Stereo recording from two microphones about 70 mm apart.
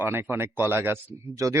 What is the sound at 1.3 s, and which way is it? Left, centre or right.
Speech, right.